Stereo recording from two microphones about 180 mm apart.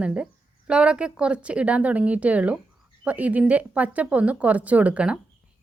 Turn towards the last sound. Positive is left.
turn(degrees=-5)  # may be behind; listen again after turning